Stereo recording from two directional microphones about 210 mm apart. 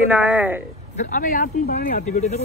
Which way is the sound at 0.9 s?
35° left (ahead or behind).